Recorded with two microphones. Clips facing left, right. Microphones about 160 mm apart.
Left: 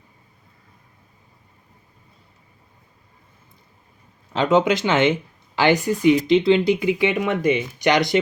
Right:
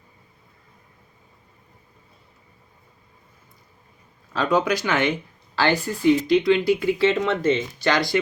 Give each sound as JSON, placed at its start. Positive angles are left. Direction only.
{"t": 4.3, "sound": "speech", "side_deg": 20}